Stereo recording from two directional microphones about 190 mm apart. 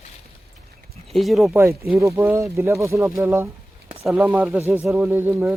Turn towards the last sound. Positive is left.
turn(degrees=-10)  # may be behind; listen again after turning